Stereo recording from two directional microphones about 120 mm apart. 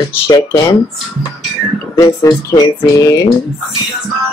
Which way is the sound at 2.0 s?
35° left (ahead or behind).